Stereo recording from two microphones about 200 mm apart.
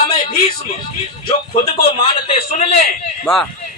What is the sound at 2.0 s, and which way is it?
Speech, 30° left (ahead or behind).